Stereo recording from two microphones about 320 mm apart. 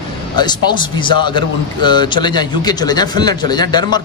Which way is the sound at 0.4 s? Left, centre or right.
Centre.